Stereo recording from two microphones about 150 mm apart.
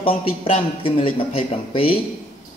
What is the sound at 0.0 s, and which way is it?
Speech, 40° left (ahead or behind).